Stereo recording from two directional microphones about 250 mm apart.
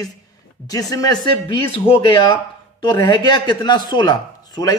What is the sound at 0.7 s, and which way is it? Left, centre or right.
Speech, centre.